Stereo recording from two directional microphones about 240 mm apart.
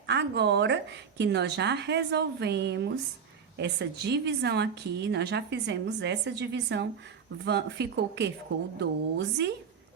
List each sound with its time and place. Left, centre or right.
0.1 s a woman's voice: right